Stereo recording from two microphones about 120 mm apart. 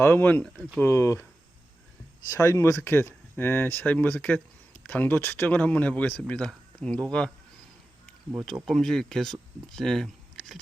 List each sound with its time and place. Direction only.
0.0 s speech: 15° left (ahead or behind)
2.3 s speech: 25° left (ahead or behind); by 7.0 s 5° left (ahead or behind)
8.6 s speech: centre (ahead or behind)